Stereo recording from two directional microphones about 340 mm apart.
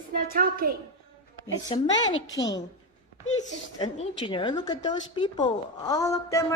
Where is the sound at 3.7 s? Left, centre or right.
Centre.